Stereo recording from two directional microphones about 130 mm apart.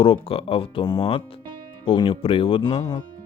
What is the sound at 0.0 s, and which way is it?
Speech, 45° left (ahead or behind).